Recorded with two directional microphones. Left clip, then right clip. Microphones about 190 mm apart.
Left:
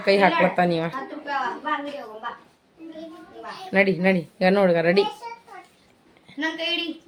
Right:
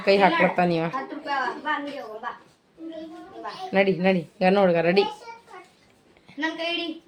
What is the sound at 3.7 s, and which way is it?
A woman's voice, centre (ahead or behind).